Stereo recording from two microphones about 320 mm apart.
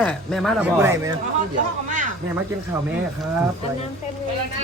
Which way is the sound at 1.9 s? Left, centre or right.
Right.